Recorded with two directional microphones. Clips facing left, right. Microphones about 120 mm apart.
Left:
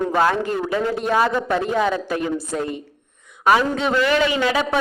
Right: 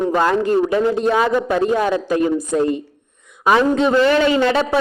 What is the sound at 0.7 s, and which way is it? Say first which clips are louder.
Speech: right 5 dB; 25° right (ahead or behind).